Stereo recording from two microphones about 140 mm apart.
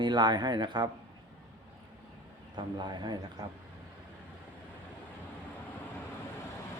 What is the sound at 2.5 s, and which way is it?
Speech, 30° right (ahead or behind).